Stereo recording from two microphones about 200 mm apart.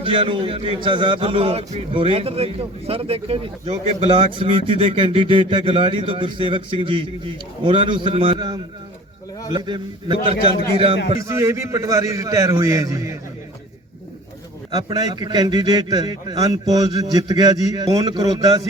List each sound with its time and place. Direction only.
0.0 s a man's voice: 25° right (ahead or behind)
11.2 s a man's voice: 15° right (ahead or behind)
14.7 s a man's voice: 20° right (ahead or behind)